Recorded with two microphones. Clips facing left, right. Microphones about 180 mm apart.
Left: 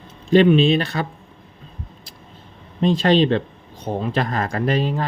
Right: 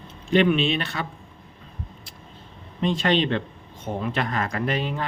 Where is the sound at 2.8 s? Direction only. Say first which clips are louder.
Left 6 dB; 35° left (ahead or behind).